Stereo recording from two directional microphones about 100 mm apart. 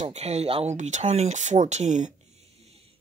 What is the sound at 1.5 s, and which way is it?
Speech, 60° right (ahead or behind).